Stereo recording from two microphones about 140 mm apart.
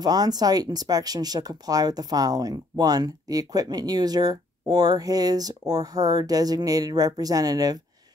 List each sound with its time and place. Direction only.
0.0 s speech: 30° right (ahead or behind)